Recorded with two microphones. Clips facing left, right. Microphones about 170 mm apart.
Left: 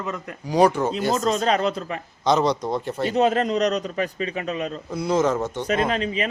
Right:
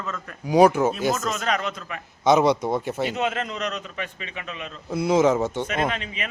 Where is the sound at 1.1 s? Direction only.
35° left (ahead or behind).